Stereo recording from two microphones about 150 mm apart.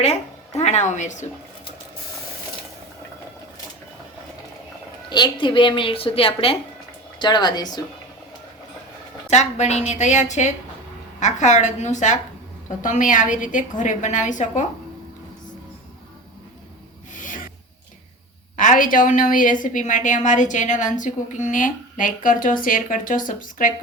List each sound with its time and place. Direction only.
0.0 s speech: 50° left (ahead or behind)
5.0 s speech: 30° left (ahead or behind)
9.3 s a woman's voice: 50° left (ahead or behind)
17.2 s rub: 60° left (ahead or behind)
18.5 s a woman's voice: 60° left (ahead or behind)